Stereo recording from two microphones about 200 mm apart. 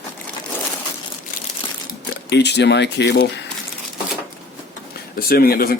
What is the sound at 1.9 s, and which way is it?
Speech, 60° left (ahead or behind).